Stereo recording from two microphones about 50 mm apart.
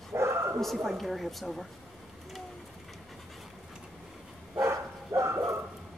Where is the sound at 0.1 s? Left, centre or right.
Right.